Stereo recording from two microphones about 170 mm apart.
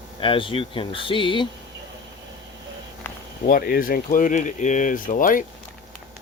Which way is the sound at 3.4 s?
60° left (ahead or behind).